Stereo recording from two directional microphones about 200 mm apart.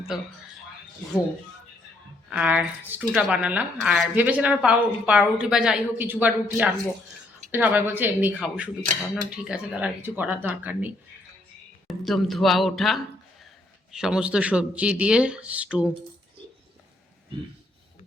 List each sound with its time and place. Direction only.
0.1 s speech: centre (ahead or behind)
2.3 s a woman's voice: 5° right (ahead or behind)
11.9 s speech: centre (ahead or behind)